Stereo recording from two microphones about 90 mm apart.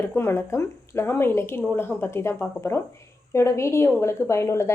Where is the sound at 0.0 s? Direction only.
25° left (ahead or behind).